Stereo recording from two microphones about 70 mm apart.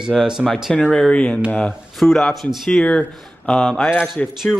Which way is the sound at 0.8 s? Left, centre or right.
Centre.